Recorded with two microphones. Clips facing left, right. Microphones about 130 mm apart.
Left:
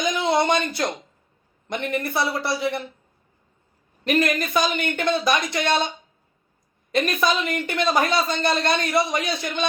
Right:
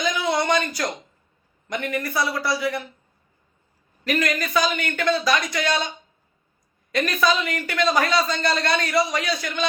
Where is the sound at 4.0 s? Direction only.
25° left (ahead or behind).